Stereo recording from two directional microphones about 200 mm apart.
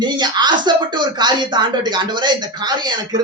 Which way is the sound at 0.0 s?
20° right (ahead or behind).